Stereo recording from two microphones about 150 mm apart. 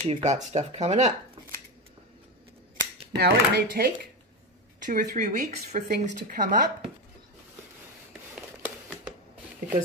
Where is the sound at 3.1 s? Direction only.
90° right.